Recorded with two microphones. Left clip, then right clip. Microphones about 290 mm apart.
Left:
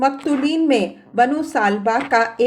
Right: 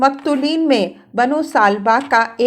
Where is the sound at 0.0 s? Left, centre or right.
Centre.